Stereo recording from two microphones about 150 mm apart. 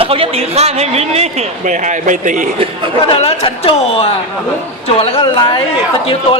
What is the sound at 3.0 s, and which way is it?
Speech, 40° left (ahead or behind).